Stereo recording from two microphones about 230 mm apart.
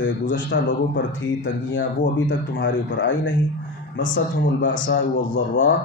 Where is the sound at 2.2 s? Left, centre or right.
Left.